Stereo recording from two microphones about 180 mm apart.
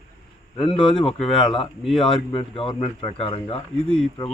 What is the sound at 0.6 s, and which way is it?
Speech, 30° left (ahead or behind).